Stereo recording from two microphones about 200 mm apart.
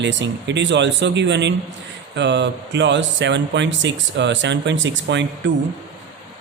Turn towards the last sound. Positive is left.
turn(degrees=-65)  # may be behind; listen again after turning